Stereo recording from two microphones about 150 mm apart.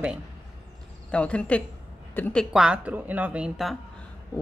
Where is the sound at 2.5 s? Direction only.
5° right (ahead or behind).